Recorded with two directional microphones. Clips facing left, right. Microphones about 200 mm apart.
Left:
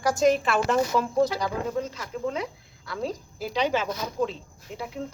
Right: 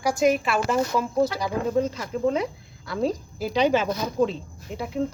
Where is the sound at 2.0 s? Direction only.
30° right (ahead or behind).